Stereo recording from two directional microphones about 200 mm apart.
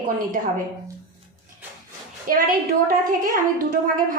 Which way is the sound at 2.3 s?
45° right (ahead or behind).